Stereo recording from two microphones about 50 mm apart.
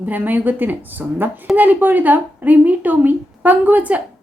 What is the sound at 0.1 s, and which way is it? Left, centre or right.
A woman's voice, right.